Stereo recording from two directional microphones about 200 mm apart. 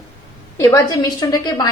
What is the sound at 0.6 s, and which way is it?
A woman's voice, 15° left (ahead or behind).